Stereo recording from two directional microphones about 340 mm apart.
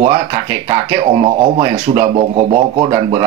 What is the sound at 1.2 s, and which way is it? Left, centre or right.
Speech, centre.